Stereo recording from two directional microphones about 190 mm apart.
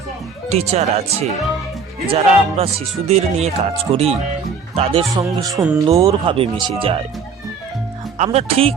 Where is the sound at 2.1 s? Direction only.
30° right (ahead or behind).